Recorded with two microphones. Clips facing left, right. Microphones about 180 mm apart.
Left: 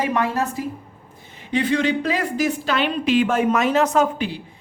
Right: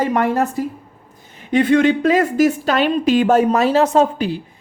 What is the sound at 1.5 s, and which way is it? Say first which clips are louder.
Speech: right 6 dB; 50° right (ahead or behind).